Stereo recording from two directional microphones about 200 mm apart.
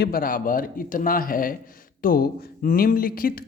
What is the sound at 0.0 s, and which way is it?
Speech, 45° left (ahead or behind).